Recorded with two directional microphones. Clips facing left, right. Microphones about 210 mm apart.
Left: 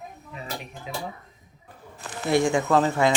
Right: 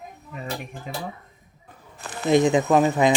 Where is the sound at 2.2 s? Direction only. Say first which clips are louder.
Right 3 dB; 20° right (ahead or behind).